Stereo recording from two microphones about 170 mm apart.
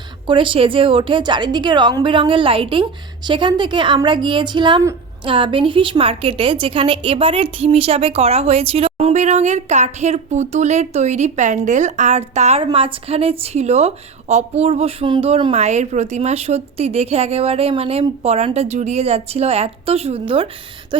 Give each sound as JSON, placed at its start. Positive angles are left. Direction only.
{"t": 0.3, "sound": "a woman's voice", "side_deg": -30}